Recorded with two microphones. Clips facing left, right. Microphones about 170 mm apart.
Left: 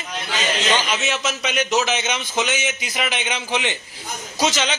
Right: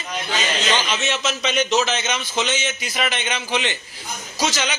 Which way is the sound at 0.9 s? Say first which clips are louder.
Even; 10° left (ahead or behind).